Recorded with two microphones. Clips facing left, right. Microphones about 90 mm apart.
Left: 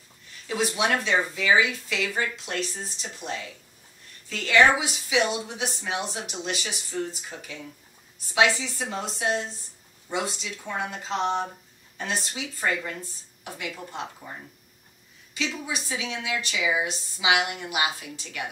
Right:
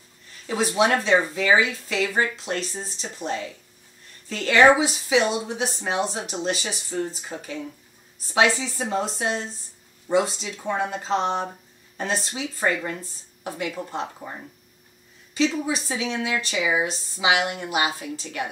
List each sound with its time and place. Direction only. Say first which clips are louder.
0.5 s a woman's voice: right 4 dB; 35° right (ahead or behind)
15.3 s a woman's voice: right 8 dB; 35° right (ahead or behind)